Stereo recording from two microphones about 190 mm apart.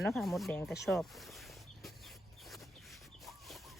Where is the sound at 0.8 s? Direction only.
Centre (ahead or behind).